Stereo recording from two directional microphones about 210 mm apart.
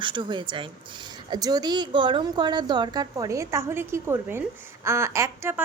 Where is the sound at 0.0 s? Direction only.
20° right (ahead or behind).